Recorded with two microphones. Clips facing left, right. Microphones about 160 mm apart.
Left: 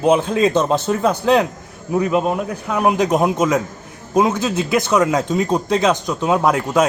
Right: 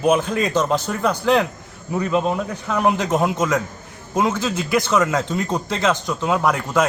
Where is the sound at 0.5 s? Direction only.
20° left (ahead or behind).